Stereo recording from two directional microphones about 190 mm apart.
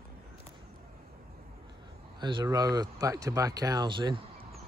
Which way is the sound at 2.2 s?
20° right (ahead or behind).